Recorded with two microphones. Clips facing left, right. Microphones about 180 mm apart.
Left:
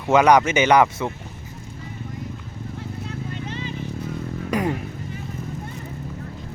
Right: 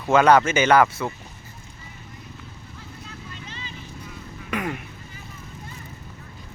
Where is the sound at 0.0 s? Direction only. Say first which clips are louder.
Left 1 dB; 15° left (ahead or behind).